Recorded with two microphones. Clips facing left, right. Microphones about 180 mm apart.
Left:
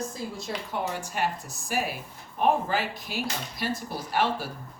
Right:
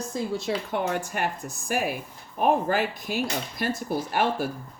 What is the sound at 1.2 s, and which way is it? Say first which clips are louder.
Speech: even; 55° right (ahead or behind).